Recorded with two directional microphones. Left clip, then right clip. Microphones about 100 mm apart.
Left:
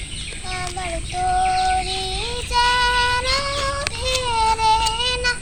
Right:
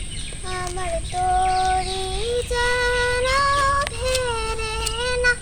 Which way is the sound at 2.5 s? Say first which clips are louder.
Left 6 dB; 45° right (ahead or behind).